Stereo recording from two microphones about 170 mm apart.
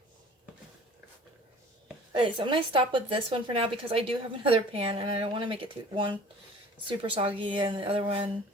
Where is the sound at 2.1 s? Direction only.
30° right (ahead or behind).